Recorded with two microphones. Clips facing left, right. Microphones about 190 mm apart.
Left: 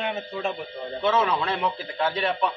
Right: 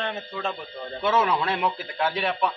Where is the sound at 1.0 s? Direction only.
5° right (ahead or behind).